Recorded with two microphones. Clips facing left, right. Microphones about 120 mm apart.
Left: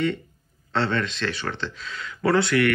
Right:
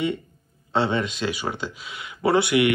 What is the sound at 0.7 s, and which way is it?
Speech, 10° right (ahead or behind).